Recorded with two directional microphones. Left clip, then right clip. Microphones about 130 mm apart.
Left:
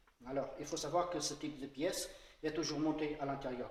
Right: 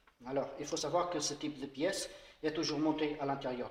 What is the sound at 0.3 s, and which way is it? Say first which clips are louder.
Speech: right 3 dB; 25° right (ahead or behind).